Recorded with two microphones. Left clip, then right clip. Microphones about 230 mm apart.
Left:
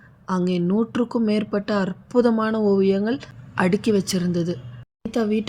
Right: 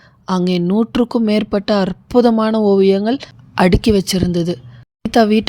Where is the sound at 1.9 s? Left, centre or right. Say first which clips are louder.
Right 6 dB; right.